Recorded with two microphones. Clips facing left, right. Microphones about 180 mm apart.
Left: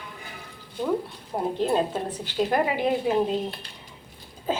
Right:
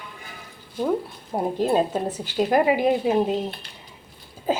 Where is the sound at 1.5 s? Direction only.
10° right (ahead or behind).